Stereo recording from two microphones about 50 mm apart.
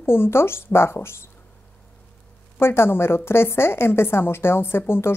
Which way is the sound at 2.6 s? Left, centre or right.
Left.